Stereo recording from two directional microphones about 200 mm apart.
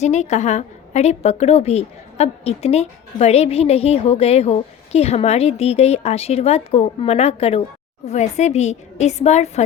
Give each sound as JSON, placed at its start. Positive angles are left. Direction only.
{"t": 0.0, "sound": "a woman's voice", "side_deg": 35}